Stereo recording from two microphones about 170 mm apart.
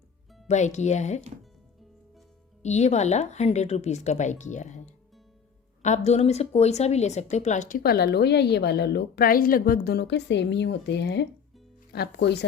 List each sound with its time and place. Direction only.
0.4 s speech: 45° left (ahead or behind)
2.6 s speech: 40° left (ahead or behind)
7.8 s a woman's voice: 65° left (ahead or behind); by 12.5 s 85° left